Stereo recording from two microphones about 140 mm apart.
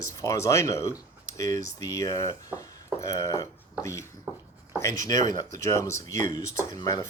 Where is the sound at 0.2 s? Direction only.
20° left (ahead or behind).